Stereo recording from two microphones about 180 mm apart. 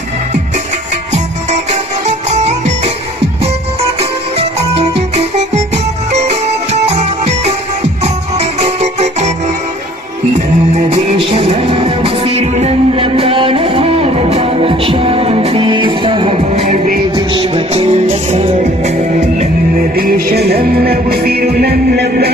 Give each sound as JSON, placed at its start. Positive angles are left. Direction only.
{"t": 1.1, "sound": "music", "side_deg": -40}
{"t": 10.3, "sound": "music", "side_deg": -35}
{"t": 19.4, "sound": "music", "side_deg": -50}